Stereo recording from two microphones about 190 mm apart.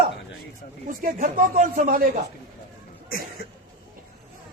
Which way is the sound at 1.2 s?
45° right (ahead or behind).